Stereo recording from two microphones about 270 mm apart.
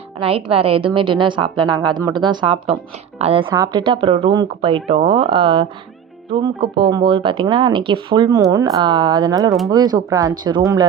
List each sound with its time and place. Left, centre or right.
0.2 s speech: right
6.7 s speech: centre